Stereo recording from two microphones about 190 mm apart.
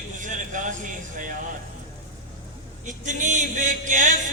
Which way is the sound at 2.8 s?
40° right (ahead or behind).